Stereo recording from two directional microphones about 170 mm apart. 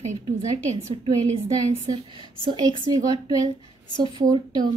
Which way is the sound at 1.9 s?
30° right (ahead or behind).